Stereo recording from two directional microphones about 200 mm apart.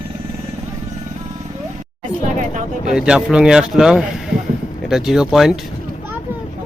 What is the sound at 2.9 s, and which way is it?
Speech, 5° right (ahead or behind).